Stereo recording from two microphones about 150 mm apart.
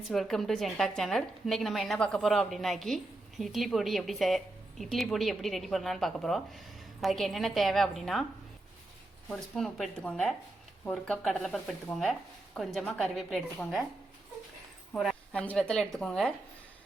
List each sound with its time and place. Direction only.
0.1 s a woman's voice: centre (ahead or behind)
9.3 s a woman's voice: 5° left (ahead or behind)
14.9 s a woman's voice: 5° left (ahead or behind)